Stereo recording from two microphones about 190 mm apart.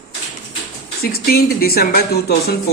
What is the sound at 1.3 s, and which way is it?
Speech, 55° left (ahead or behind).